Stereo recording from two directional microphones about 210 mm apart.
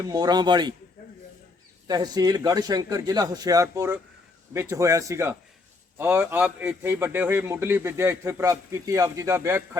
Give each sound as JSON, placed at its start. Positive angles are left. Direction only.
{"t": 0.0, "sound": "rub", "side_deg": -20}
{"t": 1.9, "sound": "a man's voice", "side_deg": -20}